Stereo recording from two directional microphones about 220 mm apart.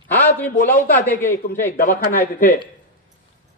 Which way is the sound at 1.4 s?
40° left (ahead or behind).